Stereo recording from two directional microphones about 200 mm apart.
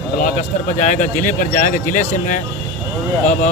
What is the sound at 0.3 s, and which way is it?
Speech, 40° left (ahead or behind).